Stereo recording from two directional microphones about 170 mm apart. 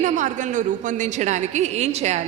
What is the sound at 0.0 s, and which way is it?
A woman's voice, 45° right (ahead or behind).